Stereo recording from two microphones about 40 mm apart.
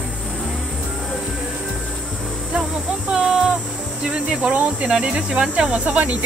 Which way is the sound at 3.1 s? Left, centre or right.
Centre.